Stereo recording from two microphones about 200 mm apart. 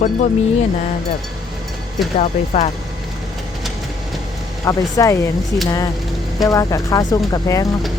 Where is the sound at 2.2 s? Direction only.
35° left (ahead or behind).